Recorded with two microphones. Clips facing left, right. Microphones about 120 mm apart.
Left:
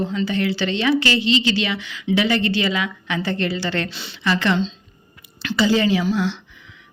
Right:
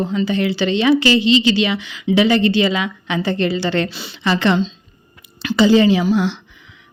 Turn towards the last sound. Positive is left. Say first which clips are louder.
# right 5 dB
turn(degrees=-20)  # may be behind; listen again after turning